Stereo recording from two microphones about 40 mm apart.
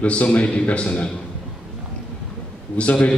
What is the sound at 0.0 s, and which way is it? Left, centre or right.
A man's voice, left.